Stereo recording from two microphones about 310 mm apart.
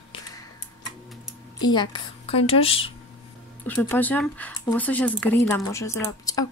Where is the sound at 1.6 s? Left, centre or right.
Centre.